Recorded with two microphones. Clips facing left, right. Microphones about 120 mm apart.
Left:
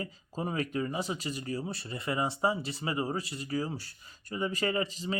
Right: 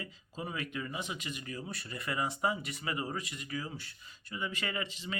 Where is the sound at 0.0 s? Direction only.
40° left (ahead or behind).